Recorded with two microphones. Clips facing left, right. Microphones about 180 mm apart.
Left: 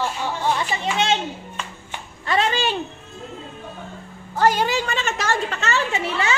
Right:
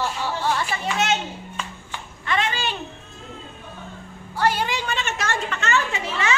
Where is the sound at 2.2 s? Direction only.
35° left (ahead or behind).